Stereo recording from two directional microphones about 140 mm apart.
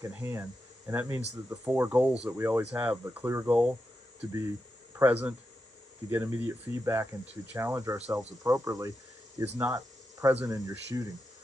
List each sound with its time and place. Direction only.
0.1 s speech: 15° right (ahead or behind)
1.6 s speech: 10° right (ahead or behind)
4.9 s speech: 10° right (ahead or behind)